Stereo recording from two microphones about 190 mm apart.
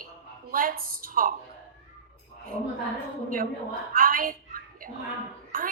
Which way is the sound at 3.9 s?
45° right (ahead or behind).